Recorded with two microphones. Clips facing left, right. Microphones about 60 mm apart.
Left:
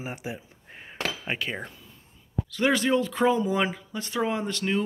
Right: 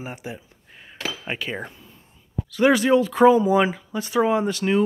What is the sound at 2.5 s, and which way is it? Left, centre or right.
Speech, centre.